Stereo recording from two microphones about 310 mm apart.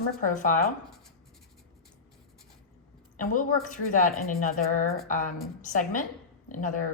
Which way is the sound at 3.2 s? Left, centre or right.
Left.